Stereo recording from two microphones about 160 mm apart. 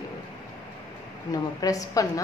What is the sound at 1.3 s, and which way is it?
Speech, 20° left (ahead or behind).